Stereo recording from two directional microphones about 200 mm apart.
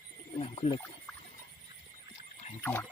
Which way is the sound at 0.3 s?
30° left (ahead or behind).